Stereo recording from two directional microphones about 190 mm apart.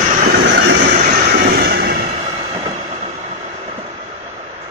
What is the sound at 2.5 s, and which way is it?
Train, 30° right (ahead or behind).